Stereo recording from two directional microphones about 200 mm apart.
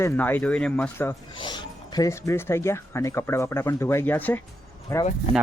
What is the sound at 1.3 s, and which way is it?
Speech, 20° left (ahead or behind).